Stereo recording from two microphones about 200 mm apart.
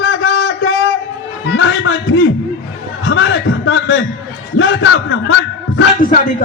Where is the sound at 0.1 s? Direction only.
75° left (ahead or behind).